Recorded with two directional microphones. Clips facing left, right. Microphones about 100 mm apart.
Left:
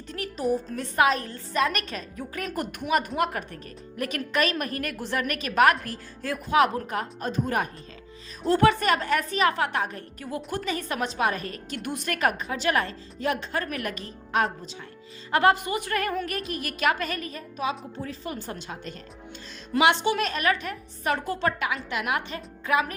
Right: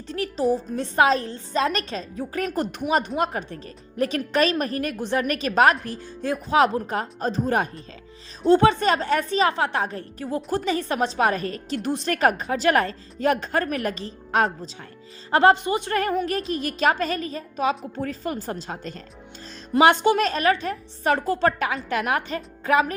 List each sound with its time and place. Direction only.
0.1 s a woman's voice: 30° right (ahead or behind)
3.9 s a woman's voice: 30° right (ahead or behind)